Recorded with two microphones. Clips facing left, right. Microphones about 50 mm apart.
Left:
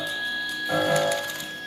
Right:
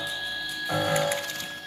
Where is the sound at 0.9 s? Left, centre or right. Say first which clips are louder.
Left 3 dB; right.